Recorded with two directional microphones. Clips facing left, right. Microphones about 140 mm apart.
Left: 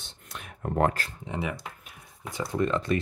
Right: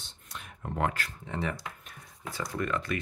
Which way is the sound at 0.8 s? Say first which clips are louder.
Left 5 dB; 45° left (ahead or behind).